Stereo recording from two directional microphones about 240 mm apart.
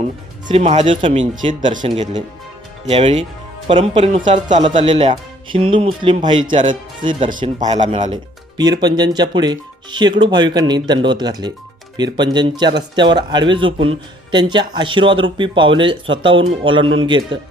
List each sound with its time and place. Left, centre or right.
0.4 s speech: right
2.8 s speech: right
7.3 s speech: right
7.7 s speech: right